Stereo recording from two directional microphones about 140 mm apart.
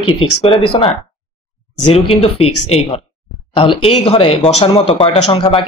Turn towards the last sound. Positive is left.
turn(degrees=40)  # may be behind; listen again after turning